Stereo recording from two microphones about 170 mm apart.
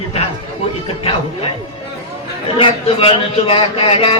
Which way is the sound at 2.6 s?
30° left (ahead or behind).